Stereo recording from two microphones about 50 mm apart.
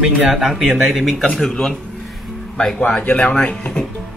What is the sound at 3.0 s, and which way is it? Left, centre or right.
Speech, left.